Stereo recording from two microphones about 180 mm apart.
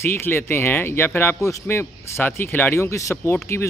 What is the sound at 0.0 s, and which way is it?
A man's voice, 10° left (ahead or behind).